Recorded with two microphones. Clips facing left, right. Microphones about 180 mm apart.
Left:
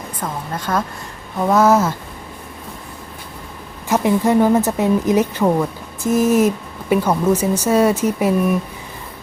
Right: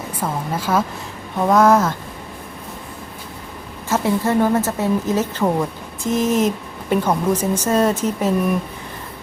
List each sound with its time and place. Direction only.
0.2 s a woman's voice: 5° right (ahead or behind)
3.8 s speech: 15° left (ahead or behind)